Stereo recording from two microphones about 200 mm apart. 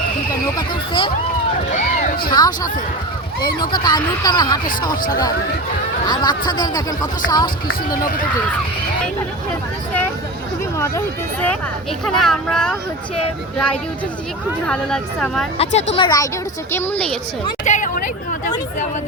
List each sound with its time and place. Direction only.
0.5 s speech: 25° left (ahead or behind)
1.7 s music: 40° left (ahead or behind)
2.3 s speech: 20° left (ahead or behind)
6.1 s speech: 20° left (ahead or behind)
10.8 s speech: 10° left (ahead or behind)
14.7 s speech: 5° left (ahead or behind)
15.5 s speech: 30° left (ahead or behind); by 17.2 s 5° left (ahead or behind)
17.7 s speech: 40° left (ahead or behind)